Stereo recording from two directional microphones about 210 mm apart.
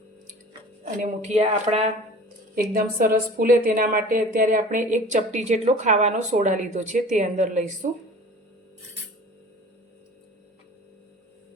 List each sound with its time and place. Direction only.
0.9 s a woman's voice: 35° right (ahead or behind)
2.6 s a woman's voice: 40° right (ahead or behind)